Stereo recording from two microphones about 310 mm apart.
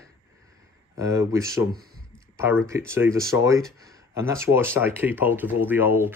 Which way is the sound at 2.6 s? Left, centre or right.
Centre.